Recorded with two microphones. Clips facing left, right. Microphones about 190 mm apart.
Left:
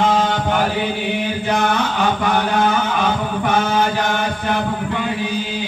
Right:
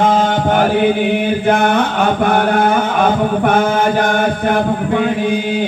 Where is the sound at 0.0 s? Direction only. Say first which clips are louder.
Right 4 dB; 50° right (ahead or behind).